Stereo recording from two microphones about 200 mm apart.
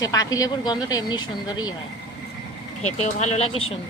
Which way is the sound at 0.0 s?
20° left (ahead or behind).